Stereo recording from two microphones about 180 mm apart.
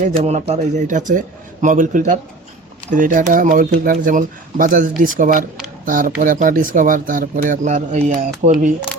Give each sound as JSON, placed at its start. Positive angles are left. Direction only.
{"t": 0.0, "sound": "speech", "side_deg": -40}